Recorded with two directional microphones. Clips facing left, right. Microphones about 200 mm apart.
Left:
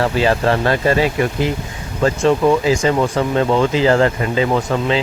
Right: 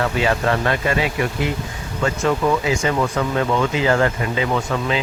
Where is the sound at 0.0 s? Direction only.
35° left (ahead or behind).